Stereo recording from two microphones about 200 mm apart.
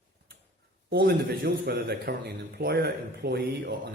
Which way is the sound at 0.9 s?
50° right (ahead or behind).